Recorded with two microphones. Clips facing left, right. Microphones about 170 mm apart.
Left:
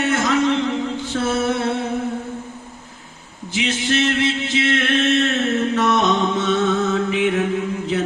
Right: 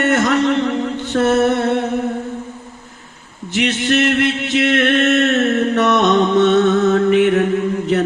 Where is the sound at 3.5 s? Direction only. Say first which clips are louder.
Right 4 dB; 55° right (ahead or behind).